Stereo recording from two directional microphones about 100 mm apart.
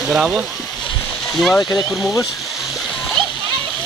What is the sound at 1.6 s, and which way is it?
Speech, 35° left (ahead or behind).